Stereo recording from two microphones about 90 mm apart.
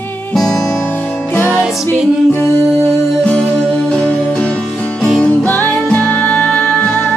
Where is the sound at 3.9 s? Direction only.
10° left (ahead or behind).